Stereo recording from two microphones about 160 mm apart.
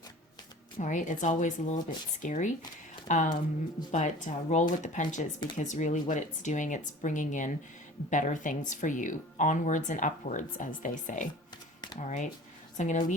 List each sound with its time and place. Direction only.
0.8 s speech: 50° left (ahead or behind)